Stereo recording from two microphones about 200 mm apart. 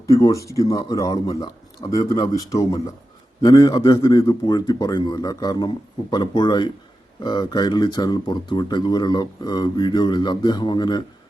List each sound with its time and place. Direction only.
0.0 s speech: 15° left (ahead or behind)